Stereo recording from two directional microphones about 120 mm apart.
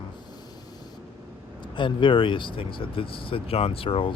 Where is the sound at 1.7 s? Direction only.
45° left (ahead or behind).